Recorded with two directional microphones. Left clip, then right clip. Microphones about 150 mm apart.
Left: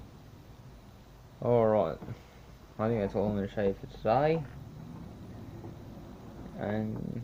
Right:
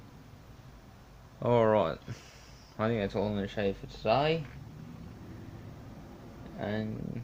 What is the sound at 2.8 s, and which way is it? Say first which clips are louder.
Speech: left 1 dB; 5° right (ahead or behind).